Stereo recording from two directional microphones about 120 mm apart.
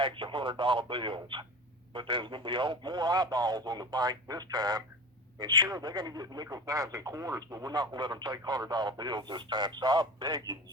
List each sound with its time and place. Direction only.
0.0 s speech: 45° right (ahead or behind)